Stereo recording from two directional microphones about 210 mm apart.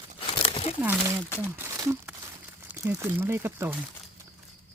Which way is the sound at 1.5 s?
10° right (ahead or behind).